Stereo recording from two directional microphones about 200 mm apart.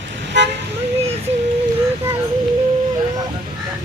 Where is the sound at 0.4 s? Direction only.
65° right (ahead or behind).